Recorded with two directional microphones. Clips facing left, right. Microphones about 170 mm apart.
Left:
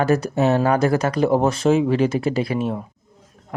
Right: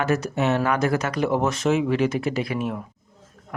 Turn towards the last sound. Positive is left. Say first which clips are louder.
# left 4 dB
turn(degrees=25)  # may be behind; listen again after turning